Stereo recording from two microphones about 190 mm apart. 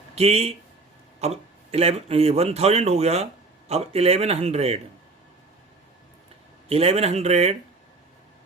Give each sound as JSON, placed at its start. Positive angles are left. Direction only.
{"t": 0.2, "sound": "speech", "side_deg": -35}
{"t": 6.7, "sound": "speech", "side_deg": -30}